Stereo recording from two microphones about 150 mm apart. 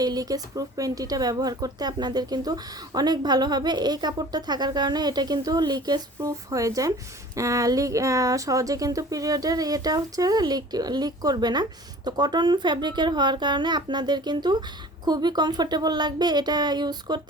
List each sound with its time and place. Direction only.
0.0 s speech: 25° right (ahead or behind)